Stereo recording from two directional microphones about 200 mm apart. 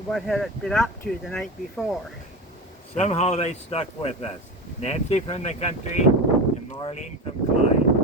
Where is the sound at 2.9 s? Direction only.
35° left (ahead or behind).